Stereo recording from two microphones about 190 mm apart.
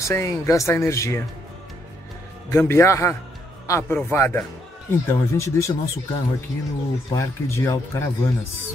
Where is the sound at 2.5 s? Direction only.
15° left (ahead or behind).